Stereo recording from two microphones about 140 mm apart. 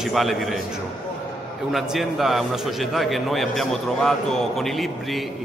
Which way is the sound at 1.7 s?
Centre (ahead or behind).